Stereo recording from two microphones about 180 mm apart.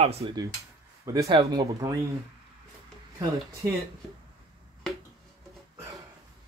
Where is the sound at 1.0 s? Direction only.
20° right (ahead or behind).